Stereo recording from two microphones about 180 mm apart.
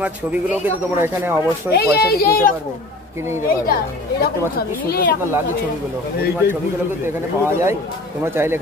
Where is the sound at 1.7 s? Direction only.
60° left (ahead or behind).